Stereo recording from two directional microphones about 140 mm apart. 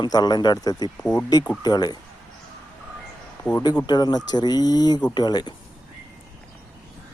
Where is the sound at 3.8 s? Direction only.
30° left (ahead or behind).